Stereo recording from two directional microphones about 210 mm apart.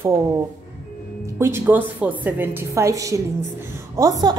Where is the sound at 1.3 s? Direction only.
10° right (ahead or behind).